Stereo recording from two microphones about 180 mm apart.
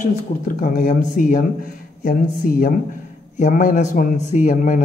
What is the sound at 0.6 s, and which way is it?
Speech, 55° left (ahead or behind).